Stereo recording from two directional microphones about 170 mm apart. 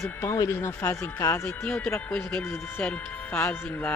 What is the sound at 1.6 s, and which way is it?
Speech, 5° left (ahead or behind).